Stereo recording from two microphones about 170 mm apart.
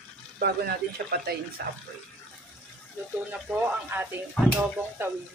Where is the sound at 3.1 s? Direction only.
10° right (ahead or behind).